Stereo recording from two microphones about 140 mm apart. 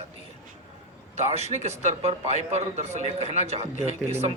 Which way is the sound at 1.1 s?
50° right (ahead or behind).